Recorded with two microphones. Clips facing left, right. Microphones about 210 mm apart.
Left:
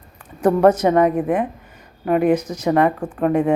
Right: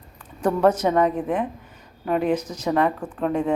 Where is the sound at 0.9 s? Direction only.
60° left (ahead or behind).